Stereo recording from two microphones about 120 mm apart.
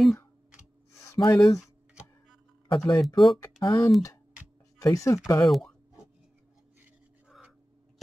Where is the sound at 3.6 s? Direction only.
25° left (ahead or behind).